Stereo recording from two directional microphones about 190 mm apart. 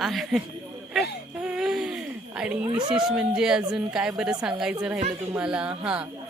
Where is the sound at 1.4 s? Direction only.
Centre (ahead or behind).